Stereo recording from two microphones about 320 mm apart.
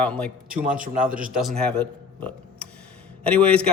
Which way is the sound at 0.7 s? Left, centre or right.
Right.